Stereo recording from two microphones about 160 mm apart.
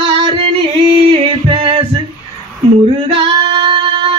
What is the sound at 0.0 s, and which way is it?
Music, 35° right (ahead or behind).